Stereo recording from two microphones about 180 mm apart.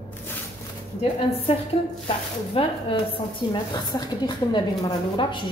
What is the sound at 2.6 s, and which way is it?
A woman's voice, 30° left (ahead or behind).